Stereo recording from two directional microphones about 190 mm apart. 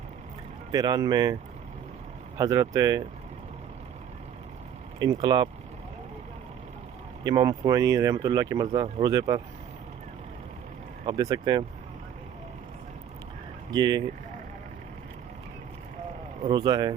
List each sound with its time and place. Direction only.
0.7 s speech: 20° right (ahead or behind)
2.4 s speech: 20° right (ahead or behind)
4.9 s speech: 20° right (ahead or behind)
7.3 s speech: 20° right (ahead or behind)
11.0 s speech: 20° right (ahead or behind)
13.7 s speech: 20° right (ahead or behind)
16.4 s speech: 20° right (ahead or behind)